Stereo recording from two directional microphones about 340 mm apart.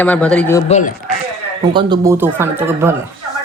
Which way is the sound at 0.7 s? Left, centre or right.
Left.